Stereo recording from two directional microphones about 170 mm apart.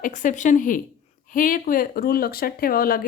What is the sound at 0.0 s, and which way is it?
A woman's voice, 50° left (ahead or behind).